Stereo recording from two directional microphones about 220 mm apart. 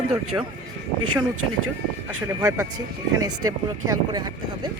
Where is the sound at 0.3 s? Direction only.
15° right (ahead or behind).